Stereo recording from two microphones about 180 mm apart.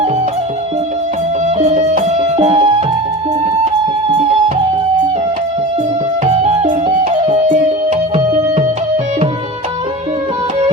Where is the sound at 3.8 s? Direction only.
35° right (ahead or behind).